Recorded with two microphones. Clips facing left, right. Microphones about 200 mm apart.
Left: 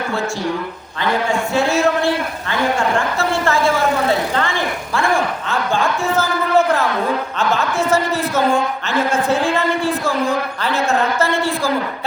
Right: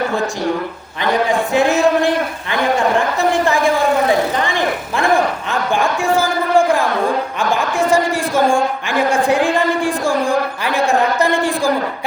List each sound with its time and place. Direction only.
1.1 s speech: 15° right (ahead or behind)